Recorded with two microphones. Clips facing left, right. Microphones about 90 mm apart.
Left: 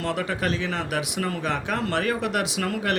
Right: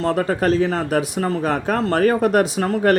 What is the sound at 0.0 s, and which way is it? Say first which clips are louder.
Speech: right 8 dB; 40° right (ahead or behind).